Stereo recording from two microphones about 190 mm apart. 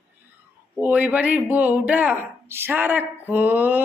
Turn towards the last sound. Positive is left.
turn(degrees=-10)  # may be behind; listen again after turning